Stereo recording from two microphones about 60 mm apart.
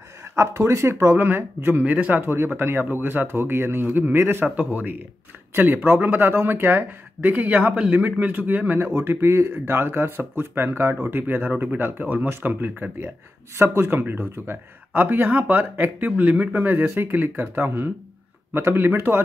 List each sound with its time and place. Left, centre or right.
0.4 s speech: right
1.8 s speech: right
2.2 s speech: right
4.6 s speech: right
8.7 s speech: right